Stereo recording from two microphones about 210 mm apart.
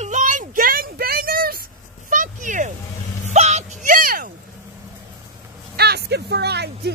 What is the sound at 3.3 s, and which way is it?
Whimper, 30° right (ahead or behind).